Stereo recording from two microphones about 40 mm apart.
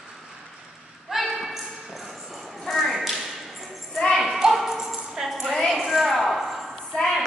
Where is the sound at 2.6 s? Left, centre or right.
Centre.